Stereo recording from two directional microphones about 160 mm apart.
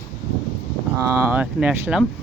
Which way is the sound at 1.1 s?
15° right (ahead or behind).